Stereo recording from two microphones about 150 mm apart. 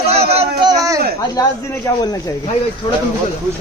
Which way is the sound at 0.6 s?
25° right (ahead or behind).